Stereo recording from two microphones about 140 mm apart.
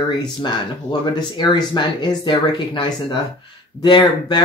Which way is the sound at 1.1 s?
30° left (ahead or behind).